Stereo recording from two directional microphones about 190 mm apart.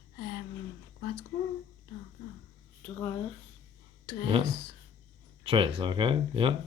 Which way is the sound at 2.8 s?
10° left (ahead or behind).